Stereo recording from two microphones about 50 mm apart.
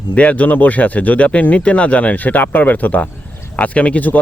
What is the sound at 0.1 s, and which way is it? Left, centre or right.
Speech, left.